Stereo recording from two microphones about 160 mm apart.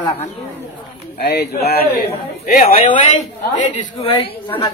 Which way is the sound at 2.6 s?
45° left (ahead or behind).